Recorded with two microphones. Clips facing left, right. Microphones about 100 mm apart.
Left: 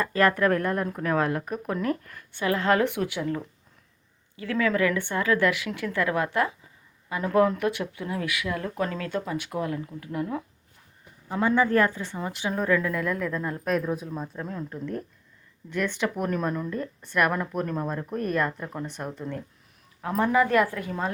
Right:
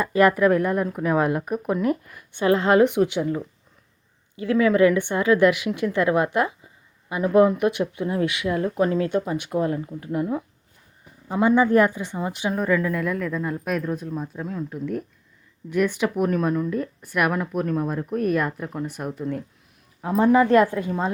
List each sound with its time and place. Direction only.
0.0 s speech: 10° right (ahead or behind)
2.4 s speech: 25° right (ahead or behind)
12.5 s a woman's voice: 5° right (ahead or behind); by 21.1 s 20° right (ahead or behind)